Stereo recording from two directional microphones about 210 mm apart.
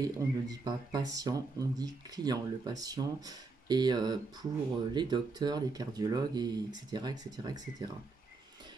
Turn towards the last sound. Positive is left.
turn(degrees=-20)  # may be behind; listen again after turning